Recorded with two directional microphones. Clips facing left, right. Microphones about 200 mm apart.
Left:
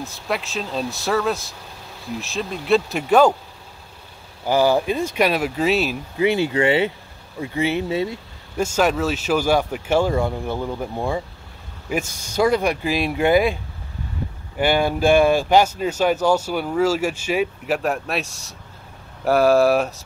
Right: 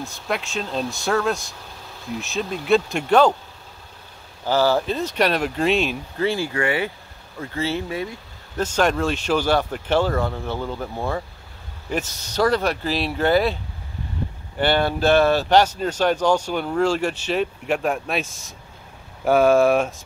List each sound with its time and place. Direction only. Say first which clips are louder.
0.0 s speech: left 1 dB; centre (ahead or behind)
4.5 s speech: left 2 dB; 15° left (ahead or behind)
6.2 s speech: left 4 dB; 20° left (ahead or behind)
8.5 s speech: left 1 dB; 10° left (ahead or behind)
14.6 s speech: left 1 dB; 10° left (ahead or behind)